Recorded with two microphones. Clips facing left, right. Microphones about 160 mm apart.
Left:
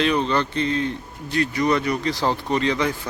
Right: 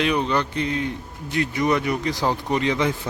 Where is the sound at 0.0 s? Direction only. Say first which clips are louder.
Left 1 dB; 15° right (ahead or behind).